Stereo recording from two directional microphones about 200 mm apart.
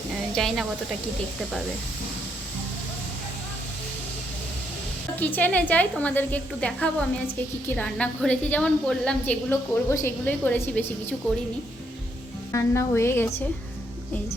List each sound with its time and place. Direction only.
0.3 s a woman's voice: centre (ahead or behind)
5.2 s a woman's voice: 10° left (ahead or behind)
12.5 s a woman's voice: 15° left (ahead or behind)